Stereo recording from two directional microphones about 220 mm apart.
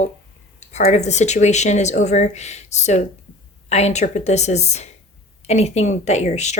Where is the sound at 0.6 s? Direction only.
30° left (ahead or behind).